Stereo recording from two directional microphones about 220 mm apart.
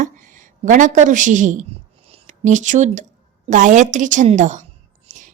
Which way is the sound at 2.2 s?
35° right (ahead or behind).